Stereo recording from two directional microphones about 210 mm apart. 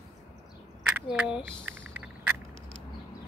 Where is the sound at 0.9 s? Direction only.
5° right (ahead or behind).